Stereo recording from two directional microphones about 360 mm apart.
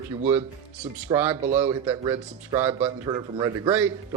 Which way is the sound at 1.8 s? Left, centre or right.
Centre.